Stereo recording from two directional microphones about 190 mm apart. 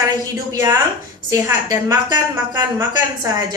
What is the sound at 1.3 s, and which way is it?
A woman's voice, 20° right (ahead or behind).